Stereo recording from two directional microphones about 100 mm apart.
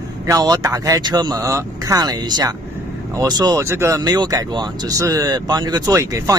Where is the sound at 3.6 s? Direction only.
25° right (ahead or behind).